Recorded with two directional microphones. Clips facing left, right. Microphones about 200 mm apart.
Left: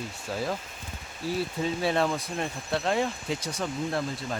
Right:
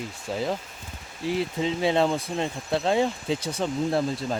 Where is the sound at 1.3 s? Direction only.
20° right (ahead or behind).